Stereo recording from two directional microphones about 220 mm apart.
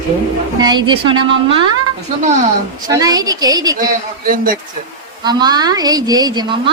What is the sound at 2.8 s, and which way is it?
Speech, 15° right (ahead or behind).